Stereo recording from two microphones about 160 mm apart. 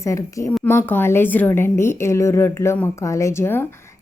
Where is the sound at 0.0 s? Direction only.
20° left (ahead or behind).